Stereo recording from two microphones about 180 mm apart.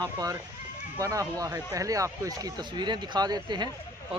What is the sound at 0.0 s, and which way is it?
Speech, 20° right (ahead or behind).